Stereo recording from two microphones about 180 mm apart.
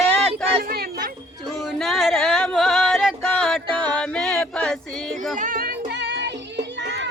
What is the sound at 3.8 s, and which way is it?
Music, 5° left (ahead or behind).